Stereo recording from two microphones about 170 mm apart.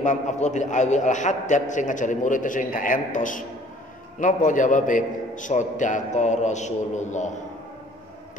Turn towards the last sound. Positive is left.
turn(degrees=45)  # may be behind; listen again after turning